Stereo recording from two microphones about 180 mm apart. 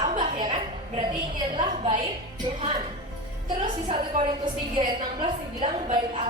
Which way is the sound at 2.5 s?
35° right (ahead or behind).